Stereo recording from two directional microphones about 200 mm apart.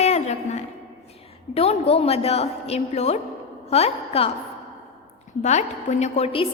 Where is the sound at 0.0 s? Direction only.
35° left (ahead or behind).